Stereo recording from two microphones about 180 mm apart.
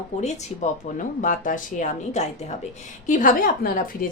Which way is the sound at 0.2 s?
40° left (ahead or behind).